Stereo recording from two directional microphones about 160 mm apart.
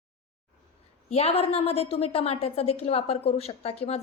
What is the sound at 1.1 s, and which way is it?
A woman's voice, 40° left (ahead or behind).